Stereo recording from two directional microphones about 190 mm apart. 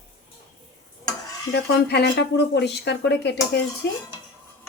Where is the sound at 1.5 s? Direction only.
60° left (ahead or behind).